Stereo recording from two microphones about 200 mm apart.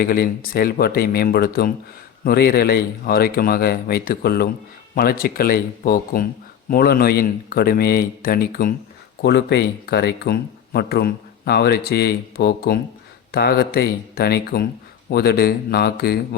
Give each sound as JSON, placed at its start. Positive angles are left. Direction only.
{"t": 0.0, "sound": "speech", "side_deg": 45}